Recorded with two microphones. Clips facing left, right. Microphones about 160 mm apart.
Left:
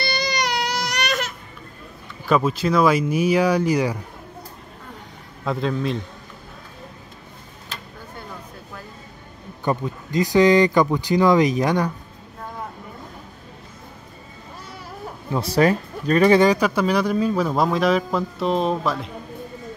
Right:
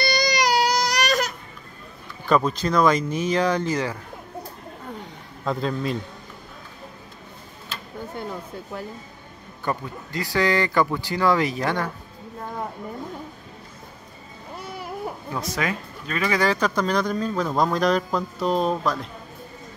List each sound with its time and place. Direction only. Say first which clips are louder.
0.0 s baby cry: right 3 dB; 40° right (ahead or behind)
2.2 s speech: left 1 dB; 5° left (ahead or behind)
5.4 s speech: left 2 dB; centre (ahead or behind)
9.7 s speech: left 5 dB; 20° left (ahead or behind)
15.3 s speech: left 10 dB; 35° left (ahead or behind)
16.3 s speech: left 5 dB; 15° left (ahead or behind)